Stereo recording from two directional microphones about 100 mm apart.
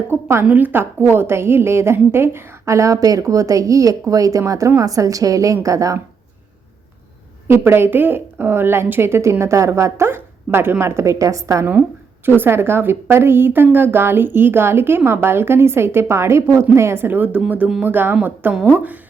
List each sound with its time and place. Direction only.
0.1 s a woman's voice: 25° right (ahead or behind)
7.4 s a woman's voice: 25° right (ahead or behind)
11.6 s a woman's voice: 20° right (ahead or behind)